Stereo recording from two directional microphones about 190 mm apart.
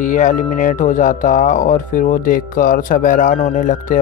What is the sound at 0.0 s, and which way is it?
Speech, 40° left (ahead or behind).